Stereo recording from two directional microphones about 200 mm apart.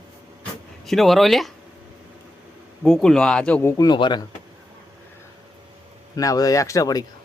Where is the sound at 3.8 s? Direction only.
20° left (ahead or behind).